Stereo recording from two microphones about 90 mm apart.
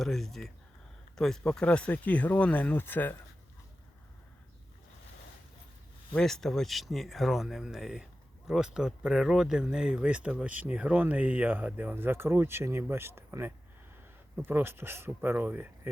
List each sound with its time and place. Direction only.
0.0 s speech: 5° left (ahead or behind); by 3.2 s 20° left (ahead or behind)
6.1 s speech: 5° left (ahead or behind); by 15.9 s 20° right (ahead or behind)